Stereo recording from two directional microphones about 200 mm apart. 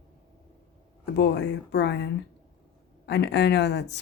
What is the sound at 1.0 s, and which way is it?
Speech, 60° left (ahead or behind).